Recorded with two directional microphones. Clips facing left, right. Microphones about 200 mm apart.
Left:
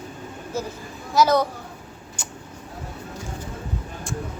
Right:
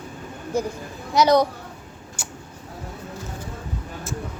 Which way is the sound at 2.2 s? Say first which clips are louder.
Right 1 dB; 10° right (ahead or behind).